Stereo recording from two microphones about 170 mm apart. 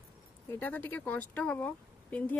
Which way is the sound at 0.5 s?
10° left (ahead or behind).